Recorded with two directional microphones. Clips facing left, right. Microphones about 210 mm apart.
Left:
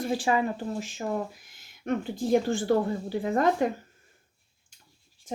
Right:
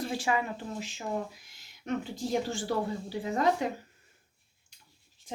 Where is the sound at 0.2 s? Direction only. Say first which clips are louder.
Left 5 dB; 35° left (ahead or behind); by 3.7 s 50° left (ahead or behind).